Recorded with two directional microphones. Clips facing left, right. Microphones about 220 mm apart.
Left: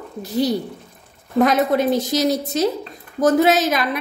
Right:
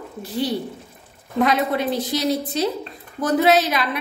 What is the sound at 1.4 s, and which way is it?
A woman's voice, 45° left (ahead or behind).